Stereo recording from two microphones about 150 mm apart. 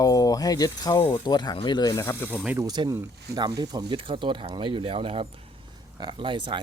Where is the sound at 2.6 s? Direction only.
25° right (ahead or behind).